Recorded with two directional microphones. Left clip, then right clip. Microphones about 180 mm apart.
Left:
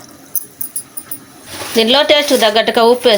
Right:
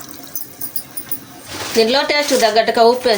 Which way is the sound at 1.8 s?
45° left (ahead or behind).